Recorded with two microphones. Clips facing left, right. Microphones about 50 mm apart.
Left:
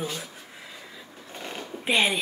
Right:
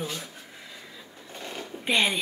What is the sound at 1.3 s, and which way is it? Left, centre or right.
Sewing machine, centre.